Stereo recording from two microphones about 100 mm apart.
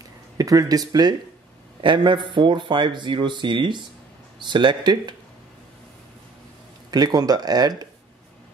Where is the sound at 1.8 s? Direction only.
55° right (ahead or behind).